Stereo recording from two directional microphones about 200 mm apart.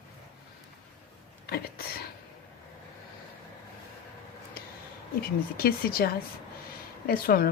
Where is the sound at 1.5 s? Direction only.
50° left (ahead or behind).